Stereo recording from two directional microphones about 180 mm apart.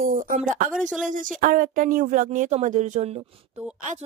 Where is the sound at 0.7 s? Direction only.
5° right (ahead or behind).